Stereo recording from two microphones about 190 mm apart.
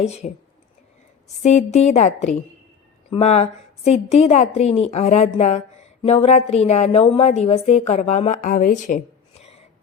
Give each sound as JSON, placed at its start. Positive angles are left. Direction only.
{"t": 0.0, "sound": "a woman's voice", "side_deg": 35}
{"t": 1.4, "sound": "a woman's voice", "side_deg": 35}
{"t": 9.4, "sound": "a sound", "side_deg": 35}